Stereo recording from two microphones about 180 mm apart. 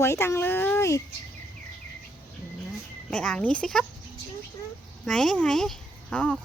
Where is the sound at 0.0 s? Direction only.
15° left (ahead or behind).